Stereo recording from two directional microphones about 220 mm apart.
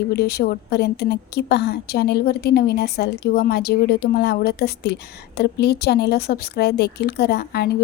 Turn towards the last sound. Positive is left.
turn(degrees=50)  # may be behind; listen again after turning